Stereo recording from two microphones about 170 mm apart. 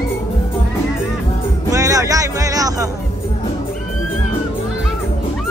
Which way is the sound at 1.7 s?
20° right (ahead or behind).